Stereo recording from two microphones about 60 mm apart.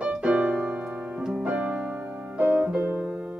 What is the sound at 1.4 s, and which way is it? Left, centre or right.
Music, right.